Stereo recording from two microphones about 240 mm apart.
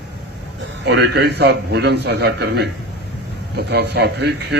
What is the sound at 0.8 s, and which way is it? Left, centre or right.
A man's voice, right.